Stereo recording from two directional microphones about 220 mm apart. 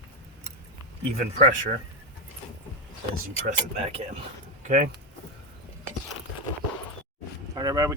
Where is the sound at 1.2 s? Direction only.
40° right (ahead or behind).